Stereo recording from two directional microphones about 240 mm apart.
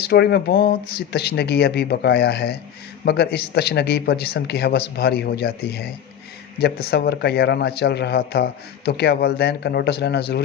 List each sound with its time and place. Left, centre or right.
0.0 s a man's voice: left